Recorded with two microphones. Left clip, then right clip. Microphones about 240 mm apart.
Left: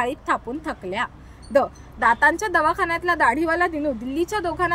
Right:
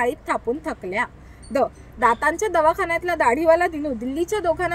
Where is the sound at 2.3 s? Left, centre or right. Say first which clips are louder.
Right 1 dB; centre.